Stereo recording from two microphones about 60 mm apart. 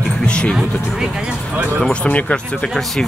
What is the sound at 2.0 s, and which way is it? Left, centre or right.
Speech, left.